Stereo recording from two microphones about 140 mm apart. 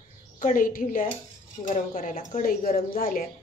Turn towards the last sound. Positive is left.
turn(degrees=90)